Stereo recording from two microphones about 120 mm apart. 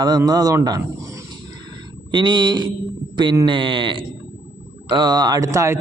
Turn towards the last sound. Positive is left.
turn(degrees=-25)  # may be behind; listen again after turning